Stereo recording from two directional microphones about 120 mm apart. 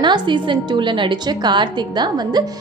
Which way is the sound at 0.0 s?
40° right (ahead or behind).